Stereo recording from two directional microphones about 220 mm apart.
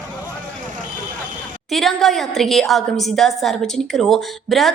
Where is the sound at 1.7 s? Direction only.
Centre (ahead or behind).